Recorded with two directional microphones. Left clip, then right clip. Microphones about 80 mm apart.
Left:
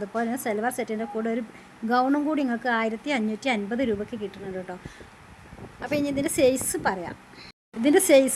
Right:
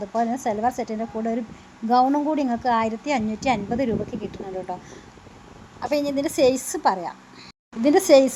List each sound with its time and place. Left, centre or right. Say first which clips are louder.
0.0 s a woman's voice: right 4 dB; centre
5.8 s a woman's voice: right 3 dB; right